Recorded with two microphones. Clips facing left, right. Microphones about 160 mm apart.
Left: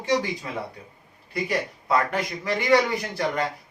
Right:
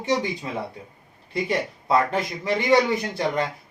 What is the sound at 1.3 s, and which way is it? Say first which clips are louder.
Speech: right 2 dB; 25° right (ahead or behind).